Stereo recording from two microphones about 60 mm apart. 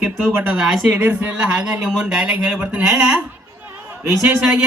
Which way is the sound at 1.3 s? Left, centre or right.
Centre.